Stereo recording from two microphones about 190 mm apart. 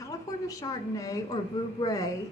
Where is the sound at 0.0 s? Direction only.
20° left (ahead or behind).